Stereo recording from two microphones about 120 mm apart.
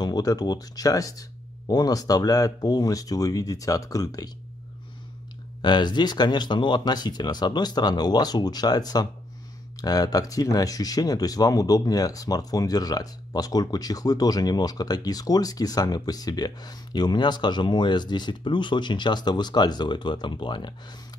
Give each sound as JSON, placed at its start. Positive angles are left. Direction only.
{"t": 0.0, "sound": "speech", "side_deg": 30}
{"t": 5.6, "sound": "speech", "side_deg": 40}